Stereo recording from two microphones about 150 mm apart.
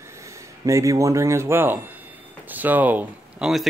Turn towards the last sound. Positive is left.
turn(degrees=-5)  # may be behind; listen again after turning